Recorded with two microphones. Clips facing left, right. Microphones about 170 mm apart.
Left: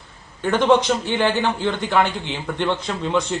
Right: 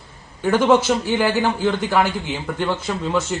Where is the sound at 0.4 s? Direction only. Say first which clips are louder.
Right 1 dB; 5° right (ahead or behind).